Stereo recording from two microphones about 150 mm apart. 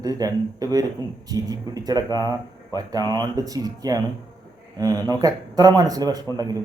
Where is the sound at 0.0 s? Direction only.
25° right (ahead or behind).